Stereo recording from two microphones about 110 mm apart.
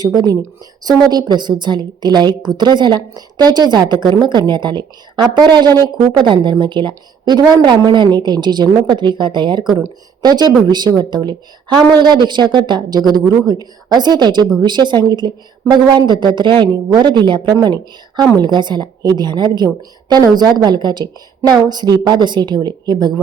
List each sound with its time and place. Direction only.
0.0 s a woman's voice: 40° right (ahead or behind)